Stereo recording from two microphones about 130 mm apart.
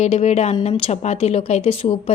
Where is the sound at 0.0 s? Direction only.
55° left (ahead or behind).